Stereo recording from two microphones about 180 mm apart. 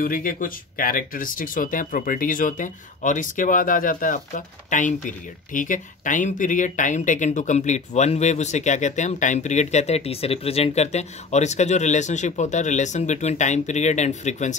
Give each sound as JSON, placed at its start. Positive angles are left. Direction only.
{"t": 0.0, "sound": "speech", "side_deg": 50}